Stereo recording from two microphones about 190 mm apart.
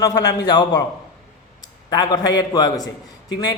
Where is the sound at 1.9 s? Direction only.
20° left (ahead or behind).